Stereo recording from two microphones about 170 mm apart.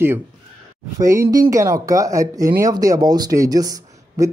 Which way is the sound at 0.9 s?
20° right (ahead or behind).